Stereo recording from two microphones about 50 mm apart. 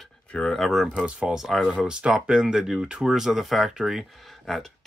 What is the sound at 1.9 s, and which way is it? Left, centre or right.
Speech, centre.